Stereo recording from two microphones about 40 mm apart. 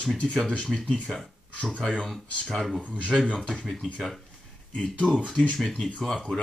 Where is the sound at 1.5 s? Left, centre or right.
Left.